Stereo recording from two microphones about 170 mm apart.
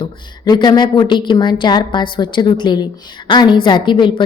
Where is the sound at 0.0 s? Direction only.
25° left (ahead or behind).